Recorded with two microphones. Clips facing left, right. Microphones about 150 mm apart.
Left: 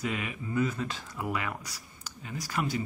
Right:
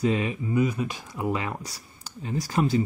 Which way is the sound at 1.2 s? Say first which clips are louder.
Right 5 dB; 25° right (ahead or behind).